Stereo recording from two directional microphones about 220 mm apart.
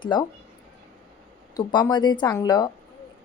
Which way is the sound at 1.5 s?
20° left (ahead or behind).